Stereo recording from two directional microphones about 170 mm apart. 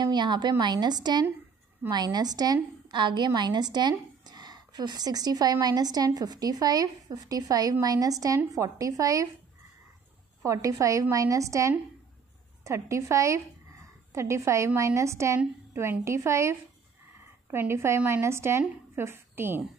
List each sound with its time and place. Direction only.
0.0 s a woman's voice: 25° right (ahead or behind)
10.4 s a woman's voice: 20° right (ahead or behind)